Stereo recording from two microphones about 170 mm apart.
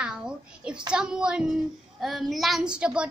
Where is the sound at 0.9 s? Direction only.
5° right (ahead or behind).